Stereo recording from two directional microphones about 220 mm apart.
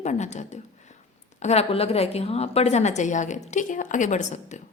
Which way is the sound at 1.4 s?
30° left (ahead or behind).